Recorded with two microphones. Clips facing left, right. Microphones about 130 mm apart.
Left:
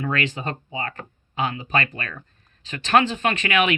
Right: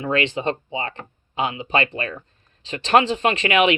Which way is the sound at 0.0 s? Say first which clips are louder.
Right 4 dB; 25° right (ahead or behind).